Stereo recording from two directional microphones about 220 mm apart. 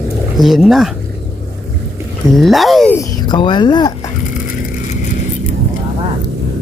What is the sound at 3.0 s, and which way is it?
Speech, 20° left (ahead or behind).